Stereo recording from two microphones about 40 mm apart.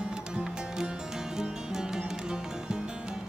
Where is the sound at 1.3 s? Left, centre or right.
Centre.